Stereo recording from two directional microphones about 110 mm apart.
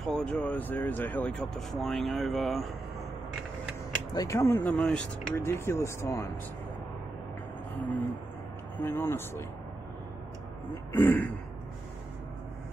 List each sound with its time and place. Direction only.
0.0 s speech: 5° left (ahead or behind)
1.5 s speech: 5° left (ahead or behind)
4.1 s speech: 30° left (ahead or behind)
4.7 s speech: 5° left (ahead or behind)
5.3 s speech: 20° left (ahead or behind)
8.8 s speech: 20° left (ahead or behind)
11.0 s speech: 15° left (ahead or behind)